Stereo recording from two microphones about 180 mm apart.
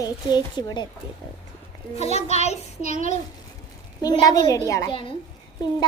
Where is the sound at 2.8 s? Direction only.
50° right (ahead or behind).